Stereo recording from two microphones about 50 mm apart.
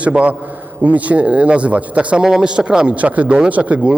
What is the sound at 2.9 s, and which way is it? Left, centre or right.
A man's voice, right.